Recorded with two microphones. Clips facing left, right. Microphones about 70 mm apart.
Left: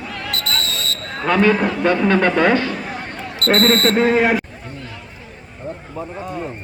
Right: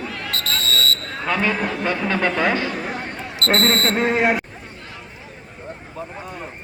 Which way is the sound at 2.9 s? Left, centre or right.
Centre.